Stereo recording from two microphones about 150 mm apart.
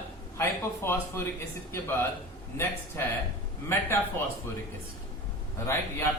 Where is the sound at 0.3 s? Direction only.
15° left (ahead or behind).